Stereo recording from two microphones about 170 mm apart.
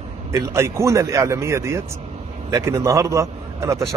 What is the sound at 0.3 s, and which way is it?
A man's voice, 15° right (ahead or behind).